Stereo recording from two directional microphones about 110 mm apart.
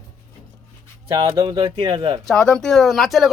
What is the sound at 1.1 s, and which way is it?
Speech, 35° right (ahead or behind).